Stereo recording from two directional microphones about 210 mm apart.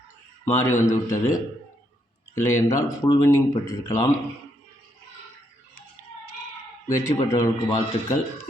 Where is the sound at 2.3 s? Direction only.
15° left (ahead or behind).